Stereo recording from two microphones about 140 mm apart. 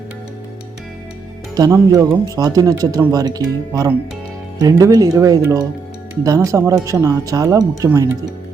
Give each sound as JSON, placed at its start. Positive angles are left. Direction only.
{"t": 1.5, "sound": "speech", "side_deg": -25}